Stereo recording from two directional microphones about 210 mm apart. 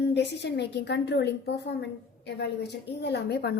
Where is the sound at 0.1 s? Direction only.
55° left (ahead or behind).